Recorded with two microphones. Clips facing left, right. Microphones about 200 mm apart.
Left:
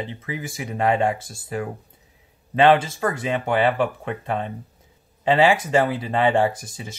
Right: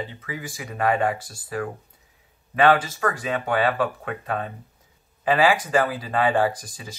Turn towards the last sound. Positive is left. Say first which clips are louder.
# even
turn(degrees=25)  # may be behind; listen again after turning